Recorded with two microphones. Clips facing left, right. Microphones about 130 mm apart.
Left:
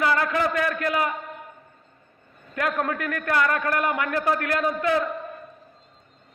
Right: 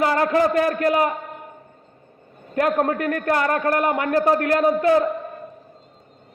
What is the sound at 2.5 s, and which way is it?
A man's voice, 35° right (ahead or behind).